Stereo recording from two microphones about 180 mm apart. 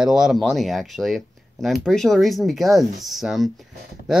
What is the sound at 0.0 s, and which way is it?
Speech, 5° right (ahead or behind).